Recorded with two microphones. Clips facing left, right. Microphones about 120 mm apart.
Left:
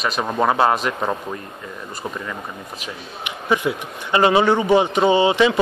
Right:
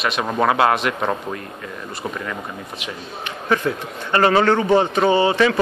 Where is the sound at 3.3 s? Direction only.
15° left (ahead or behind).